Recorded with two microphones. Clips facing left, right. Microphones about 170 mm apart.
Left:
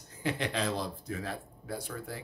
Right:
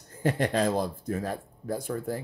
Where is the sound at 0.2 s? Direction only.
45° right (ahead or behind).